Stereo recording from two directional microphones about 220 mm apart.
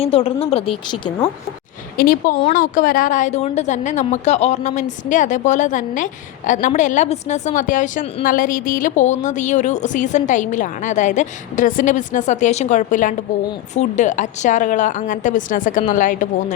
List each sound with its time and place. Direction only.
0.0 s speech: 25° left (ahead or behind)
2.0 s a woman's voice: 40° left (ahead or behind)